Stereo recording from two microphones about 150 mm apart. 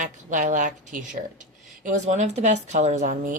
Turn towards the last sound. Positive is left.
turn(degrees=-55)  # may be behind; listen again after turning